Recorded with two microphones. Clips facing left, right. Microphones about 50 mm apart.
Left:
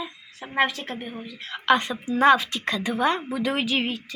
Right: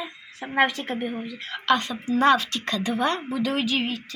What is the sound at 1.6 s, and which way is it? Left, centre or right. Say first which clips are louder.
A woman's voice: left 2 dB; centre.